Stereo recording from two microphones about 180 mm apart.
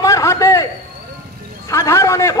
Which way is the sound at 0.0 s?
15° left (ahead or behind).